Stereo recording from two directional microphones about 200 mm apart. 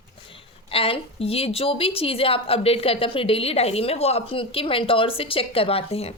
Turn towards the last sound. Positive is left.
turn(degrees=30)  # may be behind; listen again after turning